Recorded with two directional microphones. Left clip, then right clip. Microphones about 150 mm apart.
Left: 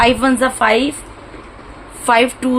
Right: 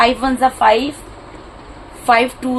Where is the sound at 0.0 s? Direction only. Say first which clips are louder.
Left 1 dB; 45° left (ahead or behind).